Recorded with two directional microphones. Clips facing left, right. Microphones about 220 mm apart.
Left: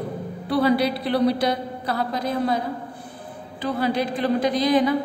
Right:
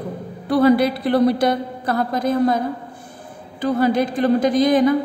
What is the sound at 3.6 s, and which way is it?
A woman's voice, 45° right (ahead or behind).